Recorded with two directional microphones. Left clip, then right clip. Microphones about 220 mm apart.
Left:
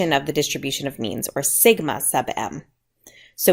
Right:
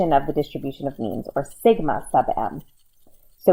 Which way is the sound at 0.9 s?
35° left (ahead or behind).